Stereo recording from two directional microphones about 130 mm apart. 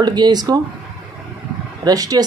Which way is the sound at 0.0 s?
30° right (ahead or behind).